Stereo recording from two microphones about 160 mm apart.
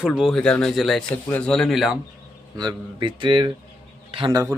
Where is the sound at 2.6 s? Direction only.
30° right (ahead or behind).